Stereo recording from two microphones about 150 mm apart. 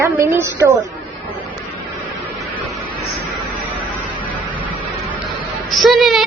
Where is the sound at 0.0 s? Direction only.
15° right (ahead or behind).